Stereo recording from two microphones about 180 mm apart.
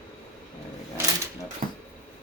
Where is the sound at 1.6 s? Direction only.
45° right (ahead or behind).